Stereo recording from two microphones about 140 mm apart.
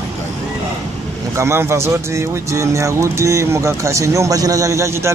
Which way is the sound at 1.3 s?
20° right (ahead or behind).